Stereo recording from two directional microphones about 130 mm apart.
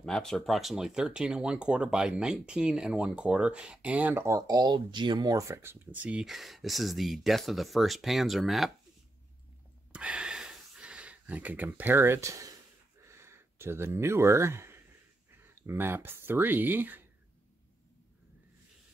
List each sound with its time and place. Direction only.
0.0 s speech: 5° left (ahead or behind)
9.9 s a sound: 10° right (ahead or behind)
15.4 s speech: 20° right (ahead or behind)